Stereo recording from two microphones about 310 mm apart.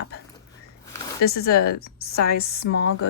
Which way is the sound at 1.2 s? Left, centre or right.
Left.